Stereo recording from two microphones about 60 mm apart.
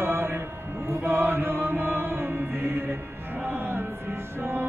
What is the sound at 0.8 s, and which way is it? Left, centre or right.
Chant, right.